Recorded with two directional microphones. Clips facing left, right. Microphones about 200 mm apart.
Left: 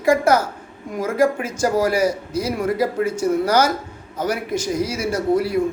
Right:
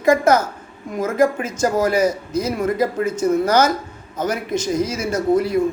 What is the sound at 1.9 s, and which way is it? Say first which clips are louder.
A man's voice: right 1 dB; 25° right (ahead or behind).